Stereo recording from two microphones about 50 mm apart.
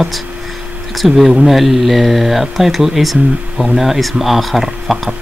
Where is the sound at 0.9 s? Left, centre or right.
Centre.